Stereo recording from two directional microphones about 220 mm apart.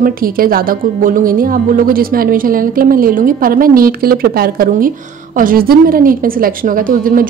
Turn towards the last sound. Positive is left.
turn(degrees=-40)  # may be behind; listen again after turning